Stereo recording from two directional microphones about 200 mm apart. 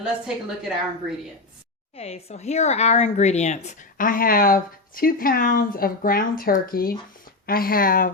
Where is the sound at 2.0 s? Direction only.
30° left (ahead or behind).